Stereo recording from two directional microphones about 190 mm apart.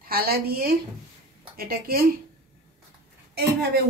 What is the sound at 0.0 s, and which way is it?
A woman's voice, 50° right (ahead or behind).